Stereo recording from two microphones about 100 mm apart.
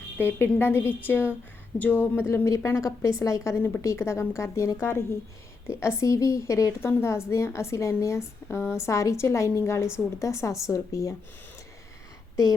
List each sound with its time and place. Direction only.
0.2 s a woman's voice: 20° left (ahead or behind)